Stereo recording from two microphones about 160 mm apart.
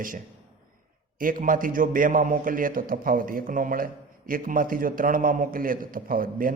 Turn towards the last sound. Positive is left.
turn(degrees=-60)  # may be behind; listen again after turning